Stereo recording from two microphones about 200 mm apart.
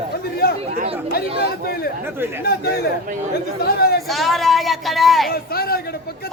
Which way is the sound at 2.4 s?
50° left (ahead or behind).